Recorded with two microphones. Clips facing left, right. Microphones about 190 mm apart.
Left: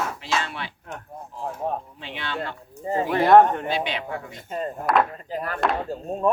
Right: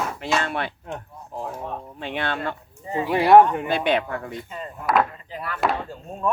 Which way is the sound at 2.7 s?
40° left (ahead or behind).